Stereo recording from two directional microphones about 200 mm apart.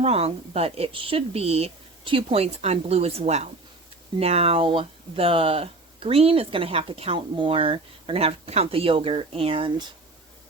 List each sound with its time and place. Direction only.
0.0 s a woman's voice: 30° right (ahead or behind)